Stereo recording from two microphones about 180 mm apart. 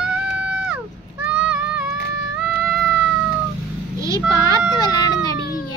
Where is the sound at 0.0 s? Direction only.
5° right (ahead or behind).